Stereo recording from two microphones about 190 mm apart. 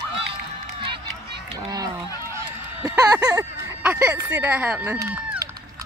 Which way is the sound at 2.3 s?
15° right (ahead or behind).